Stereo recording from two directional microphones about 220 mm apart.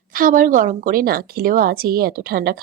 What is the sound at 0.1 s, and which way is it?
A woman's voice, 40° right (ahead or behind).